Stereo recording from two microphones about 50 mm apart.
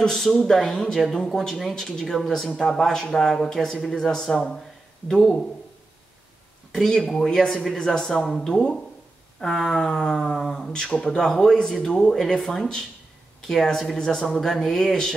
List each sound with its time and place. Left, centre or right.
0.0 s speech: centre
6.7 s speech: centre